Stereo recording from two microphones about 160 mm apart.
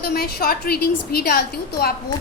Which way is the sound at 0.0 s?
75° left (ahead or behind).